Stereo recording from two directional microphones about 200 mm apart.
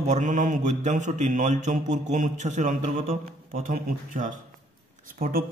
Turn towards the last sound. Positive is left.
turn(degrees=-45)  # may be behind; listen again after turning